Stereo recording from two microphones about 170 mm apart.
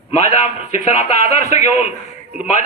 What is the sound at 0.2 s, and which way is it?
A man's voice, 40° left (ahead or behind).